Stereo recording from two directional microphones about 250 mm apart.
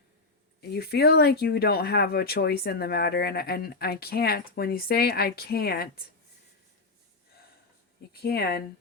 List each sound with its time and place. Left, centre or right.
0.6 s speech: left
8.1 s speech: left